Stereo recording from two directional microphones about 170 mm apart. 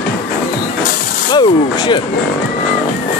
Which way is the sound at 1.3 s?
25° left (ahead or behind).